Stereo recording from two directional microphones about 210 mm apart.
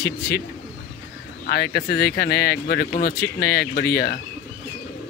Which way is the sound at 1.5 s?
45° left (ahead or behind).